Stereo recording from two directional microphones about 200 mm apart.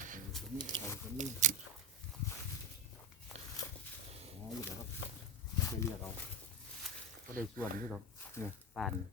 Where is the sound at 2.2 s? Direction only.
15° left (ahead or behind).